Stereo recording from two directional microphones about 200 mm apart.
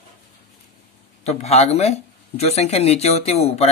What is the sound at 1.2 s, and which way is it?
Speech, 30° left (ahead or behind).